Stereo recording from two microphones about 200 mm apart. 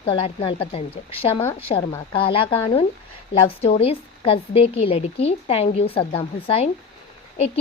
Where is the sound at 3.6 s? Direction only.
30° left (ahead or behind).